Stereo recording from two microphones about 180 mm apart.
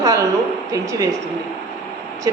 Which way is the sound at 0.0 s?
20° right (ahead or behind).